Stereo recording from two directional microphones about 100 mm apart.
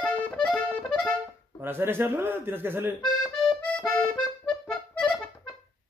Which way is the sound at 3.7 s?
10° left (ahead or behind).